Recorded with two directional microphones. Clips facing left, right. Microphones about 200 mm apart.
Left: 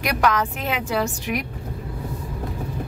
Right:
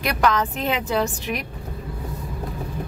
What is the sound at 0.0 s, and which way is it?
Speech, 10° left (ahead or behind).